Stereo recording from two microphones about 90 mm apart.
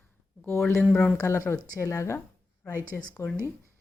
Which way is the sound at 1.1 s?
30° left (ahead or behind).